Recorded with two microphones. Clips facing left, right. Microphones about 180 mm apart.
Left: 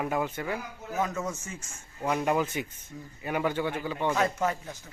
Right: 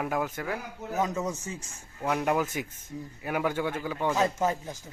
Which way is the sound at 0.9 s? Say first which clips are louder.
Right 1 dB; 15° right (ahead or behind).